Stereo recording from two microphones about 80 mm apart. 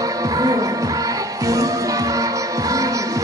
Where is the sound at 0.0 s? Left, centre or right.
Right.